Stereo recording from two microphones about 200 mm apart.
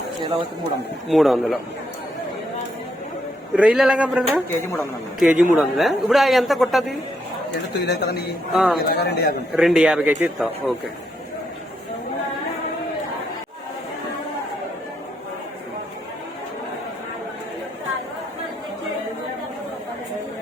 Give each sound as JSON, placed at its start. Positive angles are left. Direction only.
{"t": 0.2, "sound": "speech", "side_deg": -25}
{"t": 1.0, "sound": "a man's voice", "side_deg": 0}
{"t": 3.5, "sound": "a man's voice", "side_deg": -5}
{"t": 7.7, "sound": "speech", "side_deg": 60}
{"t": 8.5, "sound": "a man's voice", "side_deg": 0}
{"t": 8.8, "sound": "a man's voice", "side_deg": 55}
{"t": 9.6, "sound": "a man's voice", "side_deg": -5}